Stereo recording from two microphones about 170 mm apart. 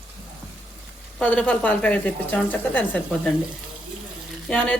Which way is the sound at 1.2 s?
5° left (ahead or behind).